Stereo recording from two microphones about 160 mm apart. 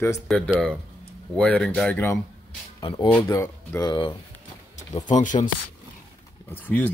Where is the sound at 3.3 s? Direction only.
20° left (ahead or behind).